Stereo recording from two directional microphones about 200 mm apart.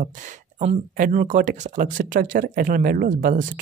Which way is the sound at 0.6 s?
35° right (ahead or behind).